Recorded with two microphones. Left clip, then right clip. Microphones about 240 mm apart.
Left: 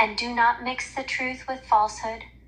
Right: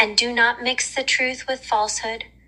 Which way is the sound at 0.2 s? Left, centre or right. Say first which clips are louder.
Right 4 dB; right.